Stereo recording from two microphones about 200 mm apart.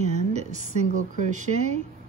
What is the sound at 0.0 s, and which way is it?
A woman's voice, 35° right (ahead or behind).